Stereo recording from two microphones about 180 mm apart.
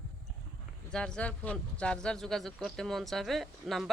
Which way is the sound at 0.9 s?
5° left (ahead or behind).